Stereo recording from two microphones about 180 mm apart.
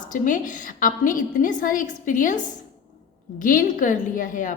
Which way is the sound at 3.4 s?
50° left (ahead or behind).